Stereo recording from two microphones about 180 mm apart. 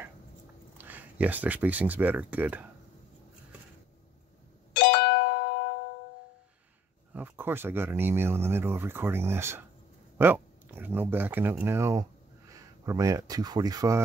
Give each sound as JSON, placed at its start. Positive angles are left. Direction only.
{"t": 0.7, "sound": "speech", "side_deg": -10}
{"t": 4.7, "sound": "music", "side_deg": 65}
{"t": 7.2, "sound": "speech", "side_deg": -10}